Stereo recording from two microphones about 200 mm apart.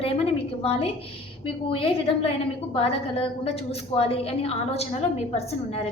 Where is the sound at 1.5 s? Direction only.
25° left (ahead or behind).